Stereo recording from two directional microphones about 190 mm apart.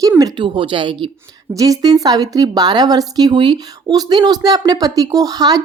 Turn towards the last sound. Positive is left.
turn(degrees=-20)  # may be behind; listen again after turning